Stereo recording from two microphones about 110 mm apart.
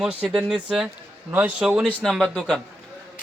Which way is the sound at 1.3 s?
15° right (ahead or behind).